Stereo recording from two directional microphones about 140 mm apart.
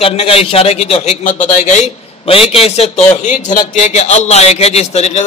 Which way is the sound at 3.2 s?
65° left (ahead or behind).